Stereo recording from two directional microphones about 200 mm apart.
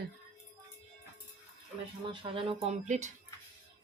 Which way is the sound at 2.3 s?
30° right (ahead or behind).